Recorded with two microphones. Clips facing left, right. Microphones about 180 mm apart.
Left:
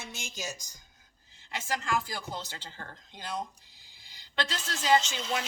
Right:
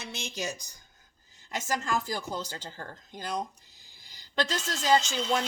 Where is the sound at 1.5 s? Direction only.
45° right (ahead or behind).